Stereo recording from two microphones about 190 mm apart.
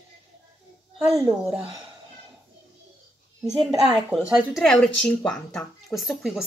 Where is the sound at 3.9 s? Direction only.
5° right (ahead or behind).